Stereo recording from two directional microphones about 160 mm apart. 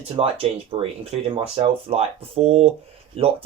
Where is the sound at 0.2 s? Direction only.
35° right (ahead or behind).